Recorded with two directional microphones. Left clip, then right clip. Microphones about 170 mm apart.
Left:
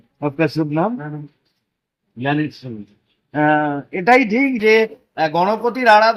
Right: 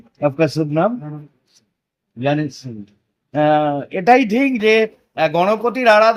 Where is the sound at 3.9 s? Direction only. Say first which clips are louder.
Even; 50° right (ahead or behind).